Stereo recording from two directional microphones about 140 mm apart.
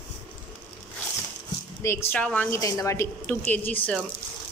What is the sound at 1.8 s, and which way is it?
Speech, 20° left (ahead or behind).